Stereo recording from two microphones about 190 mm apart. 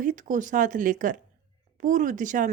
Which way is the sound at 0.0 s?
45° right (ahead or behind).